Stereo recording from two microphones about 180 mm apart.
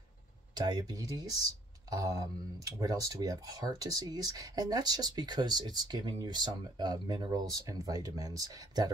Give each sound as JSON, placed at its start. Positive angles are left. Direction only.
{"t": 0.6, "sound": "speech", "side_deg": -20}